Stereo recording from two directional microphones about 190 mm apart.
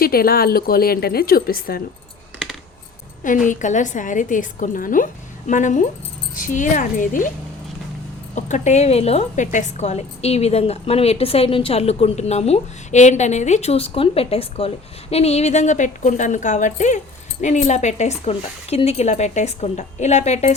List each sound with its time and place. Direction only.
0.0 s a woman's voice: 50° left (ahead or behind)
3.2 s a woman's voice: 45° left (ahead or behind)
8.4 s a woman's voice: 40° left (ahead or behind)